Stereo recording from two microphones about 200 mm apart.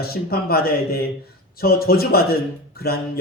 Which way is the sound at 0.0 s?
50° left (ahead or behind).